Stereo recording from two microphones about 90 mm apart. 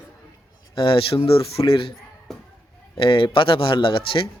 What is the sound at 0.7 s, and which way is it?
Speech, 75° left (ahead or behind).